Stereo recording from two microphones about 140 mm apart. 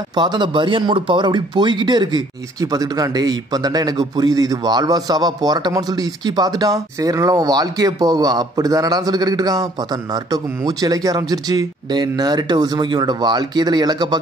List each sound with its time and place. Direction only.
0.1 s speech: 30° right (ahead or behind)